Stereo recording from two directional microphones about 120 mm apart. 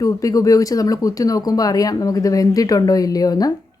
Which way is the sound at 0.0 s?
30° left (ahead or behind).